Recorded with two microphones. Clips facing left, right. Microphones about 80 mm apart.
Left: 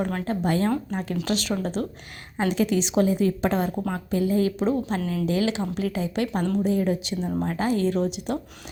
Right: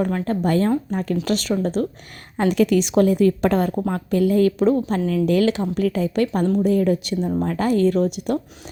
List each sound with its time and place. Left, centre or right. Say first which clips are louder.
0.3 s speech: right 4 dB; right
2.4 s a woman's voice: right 5 dB; right
6.6 s a woman's voice: right 4 dB; right